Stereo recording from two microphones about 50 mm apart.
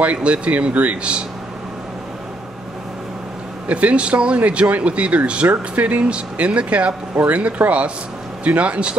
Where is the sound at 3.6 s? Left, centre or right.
Right.